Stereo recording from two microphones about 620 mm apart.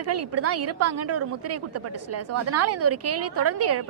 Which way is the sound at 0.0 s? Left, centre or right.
Right.